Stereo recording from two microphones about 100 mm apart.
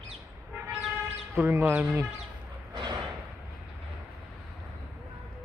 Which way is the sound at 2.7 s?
45° right (ahead or behind).